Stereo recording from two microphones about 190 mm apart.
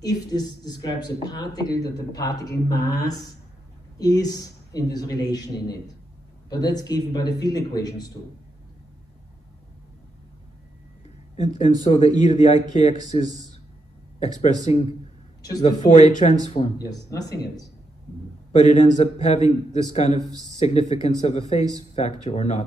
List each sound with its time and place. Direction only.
0.0 s speech: 20° left (ahead or behind)
11.3 s a man's voice: 40° left (ahead or behind)
16.7 s speech: 20° left (ahead or behind)
18.5 s a man's voice: 40° left (ahead or behind)